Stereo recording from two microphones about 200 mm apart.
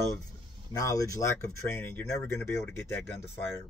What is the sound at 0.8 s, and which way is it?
Speech, 15° left (ahead or behind).